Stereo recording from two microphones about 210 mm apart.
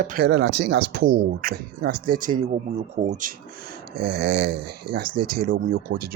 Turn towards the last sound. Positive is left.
turn(degrees=-45)  # may be behind; listen again after turning